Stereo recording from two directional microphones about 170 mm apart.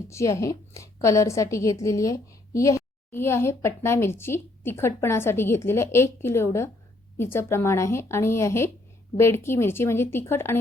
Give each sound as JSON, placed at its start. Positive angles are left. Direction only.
{"t": 0.1, "sound": "a woman's voice", "side_deg": 15}